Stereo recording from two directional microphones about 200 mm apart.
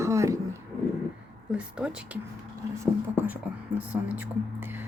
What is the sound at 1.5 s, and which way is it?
Speech, 5° right (ahead or behind).